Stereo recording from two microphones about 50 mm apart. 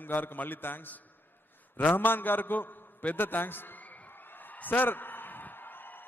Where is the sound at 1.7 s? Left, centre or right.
Left.